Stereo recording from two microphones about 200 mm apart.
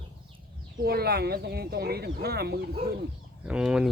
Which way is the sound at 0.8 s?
50° right (ahead or behind).